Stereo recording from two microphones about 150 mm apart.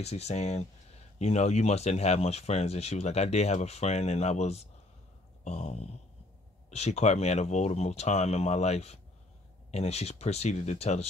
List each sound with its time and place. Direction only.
0.0 s speech: 45° left (ahead or behind)
5.4 s a sound: 50° left (ahead or behind)
6.7 s speech: 45° left (ahead or behind)